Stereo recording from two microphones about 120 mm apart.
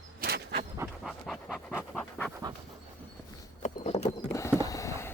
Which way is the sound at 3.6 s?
70° left (ahead or behind).